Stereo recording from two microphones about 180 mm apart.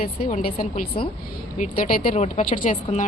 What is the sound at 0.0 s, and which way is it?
Speech, 45° left (ahead or behind).